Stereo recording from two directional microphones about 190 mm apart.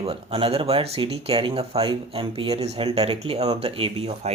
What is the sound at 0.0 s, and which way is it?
Speech, 30° right (ahead or behind).